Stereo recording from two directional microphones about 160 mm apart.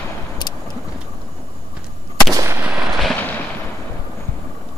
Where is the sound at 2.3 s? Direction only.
20° right (ahead or behind).